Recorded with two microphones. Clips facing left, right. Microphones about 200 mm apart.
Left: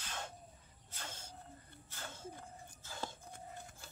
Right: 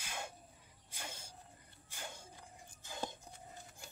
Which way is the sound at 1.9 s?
15° right (ahead or behind).